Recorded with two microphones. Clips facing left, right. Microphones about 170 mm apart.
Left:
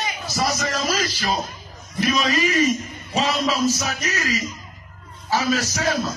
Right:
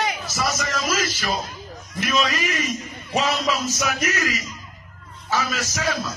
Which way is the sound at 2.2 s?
35° left (ahead or behind).